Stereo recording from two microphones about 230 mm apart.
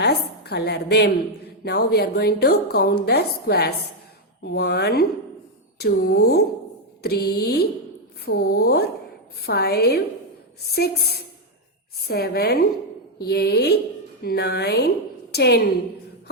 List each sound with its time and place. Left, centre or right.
0.0 s a woman's voice: left
12.0 s a woman's voice: left